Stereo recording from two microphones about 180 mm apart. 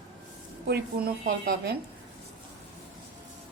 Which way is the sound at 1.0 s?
60° right (ahead or behind).